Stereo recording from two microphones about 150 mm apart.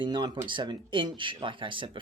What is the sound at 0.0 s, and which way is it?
Speech, 30° right (ahead or behind).